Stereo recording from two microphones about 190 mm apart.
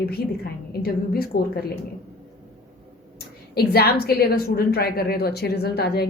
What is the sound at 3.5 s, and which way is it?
Speech, 55° left (ahead or behind).